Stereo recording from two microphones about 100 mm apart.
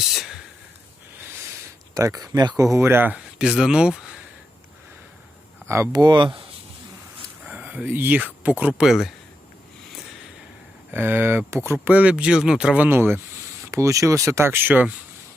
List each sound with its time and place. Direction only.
0.1 s speech: centre (ahead or behind)
2.0 s speech: 35° right (ahead or behind)
2.7 s speech: 25° right (ahead or behind)
3.3 s speech: 5° right (ahead or behind)
5.6 s speech: 25° right (ahead or behind)
5.9 s speech: 45° right (ahead or behind)
7.4 s speech: 15° right (ahead or behind)
10.9 s speech: 20° right (ahead or behind)
11.9 s speech: 10° right (ahead or behind)